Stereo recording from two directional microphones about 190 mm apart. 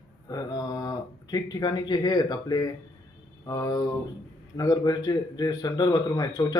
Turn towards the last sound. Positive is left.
turn(degrees=20)  # may be behind; listen again after turning